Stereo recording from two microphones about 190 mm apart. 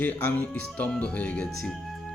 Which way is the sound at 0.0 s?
10° left (ahead or behind).